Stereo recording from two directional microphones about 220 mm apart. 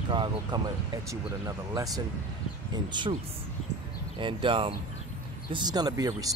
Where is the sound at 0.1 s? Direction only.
20° right (ahead or behind).